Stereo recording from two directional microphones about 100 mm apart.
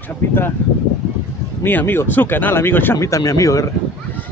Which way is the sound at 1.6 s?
20° left (ahead or behind).